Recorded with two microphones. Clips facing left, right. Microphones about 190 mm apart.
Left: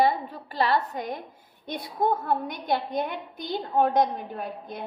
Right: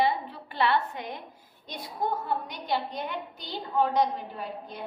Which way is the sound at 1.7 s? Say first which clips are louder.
Left 5 dB; 55° left (ahead or behind).